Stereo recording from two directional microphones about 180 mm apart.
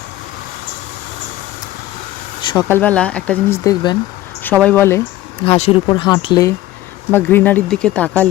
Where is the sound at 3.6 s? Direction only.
25° left (ahead or behind).